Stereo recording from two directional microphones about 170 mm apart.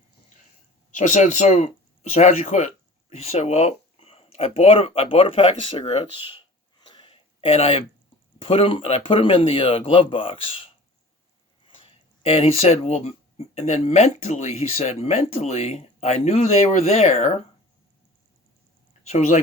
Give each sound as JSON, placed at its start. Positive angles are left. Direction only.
{"t": 0.9, "sound": "speech", "side_deg": 45}
{"t": 6.8, "sound": "a sound", "side_deg": 30}
{"t": 8.4, "sound": "speech", "side_deg": 35}
{"t": 11.8, "sound": "speech", "side_deg": 35}
{"t": 19.0, "sound": "speech", "side_deg": 40}